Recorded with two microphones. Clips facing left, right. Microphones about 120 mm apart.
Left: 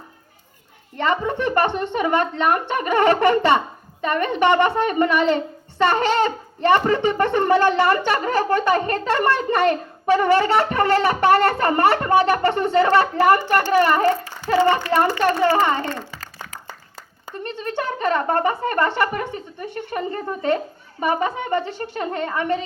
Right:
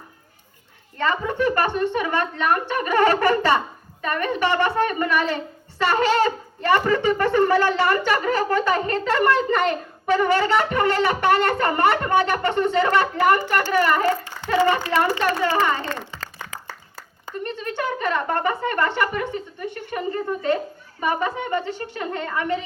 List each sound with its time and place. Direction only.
0.9 s a woman's voice: 25° left (ahead or behind)
16.6 s a sound: 20° left (ahead or behind)
17.4 s speech: 35° left (ahead or behind)
21.0 s speech: 35° left (ahead or behind)